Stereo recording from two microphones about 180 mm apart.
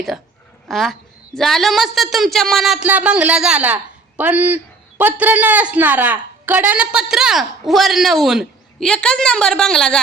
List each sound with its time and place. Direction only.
0.7 s a man's voice: centre (ahead or behind)